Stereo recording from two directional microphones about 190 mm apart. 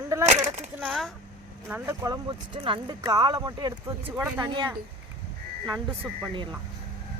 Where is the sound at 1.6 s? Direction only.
10° right (ahead or behind).